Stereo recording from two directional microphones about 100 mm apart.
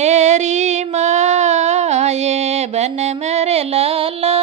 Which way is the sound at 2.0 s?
90° right.